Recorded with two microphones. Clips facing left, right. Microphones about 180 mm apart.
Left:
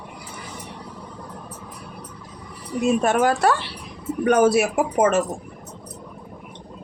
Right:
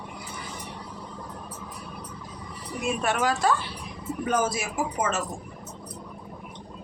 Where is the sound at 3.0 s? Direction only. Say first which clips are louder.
Left 3 dB; 50° left (ahead or behind).